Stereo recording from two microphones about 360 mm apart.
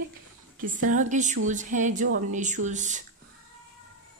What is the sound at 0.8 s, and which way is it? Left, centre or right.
A woman's voice, centre.